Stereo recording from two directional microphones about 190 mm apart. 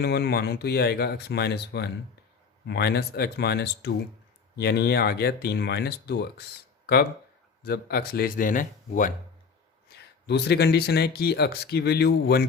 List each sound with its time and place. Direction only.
0.0 s speech: 55° left (ahead or behind)
10.0 s speech: 60° left (ahead or behind)